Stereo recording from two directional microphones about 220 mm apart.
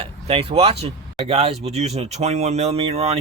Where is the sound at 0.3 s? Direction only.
25° right (ahead or behind).